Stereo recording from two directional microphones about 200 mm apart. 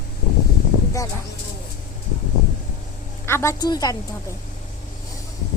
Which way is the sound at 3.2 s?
15° left (ahead or behind).